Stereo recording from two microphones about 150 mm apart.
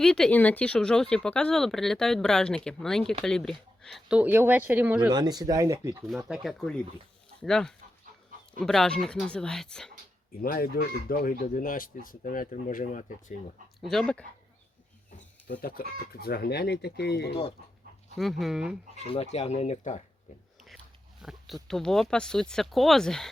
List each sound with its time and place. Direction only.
0.0 s speech: 5° left (ahead or behind)
5.1 s speech: 25° right (ahead or behind)
6.2 s speech: centre (ahead or behind)
10.4 s speech: 75° left (ahead or behind); by 13.3 s 55° left (ahead or behind)
13.8 s speech: 5° left (ahead or behind)
15.6 s speech: 85° left
17.6 s speech: 90° right
18.2 s speech: centre (ahead or behind)
18.9 s speech: 45° left (ahead or behind)
21.2 s speech: centre (ahead or behind)